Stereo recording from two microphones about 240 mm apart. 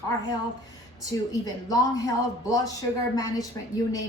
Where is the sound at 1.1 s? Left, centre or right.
Centre.